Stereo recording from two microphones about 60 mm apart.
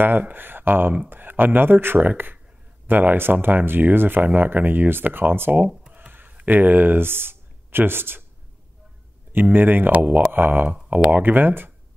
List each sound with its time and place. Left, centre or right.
0.0 s speech: right
5.9 s a sound: right
9.3 s speech: right